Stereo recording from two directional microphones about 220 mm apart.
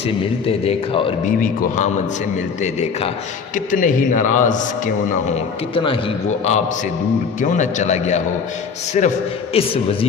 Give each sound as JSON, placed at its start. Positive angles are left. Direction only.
{"t": 0.4, "sound": "a man's voice", "side_deg": 25}
{"t": 3.5, "sound": "a man's voice", "side_deg": 35}
{"t": 5.7, "sound": "a man's voice", "side_deg": 25}